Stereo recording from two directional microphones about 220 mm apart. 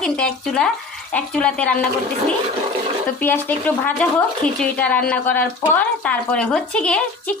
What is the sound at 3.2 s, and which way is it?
A woman's voice, 10° left (ahead or behind).